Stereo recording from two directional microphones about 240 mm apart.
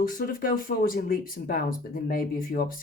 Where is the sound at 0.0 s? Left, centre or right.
Left.